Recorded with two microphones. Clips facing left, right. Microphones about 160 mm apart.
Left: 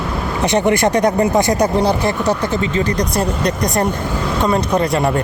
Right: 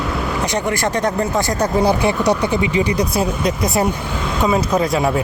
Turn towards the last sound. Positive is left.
turn(degrees=0)  # may be behind; listen again after turning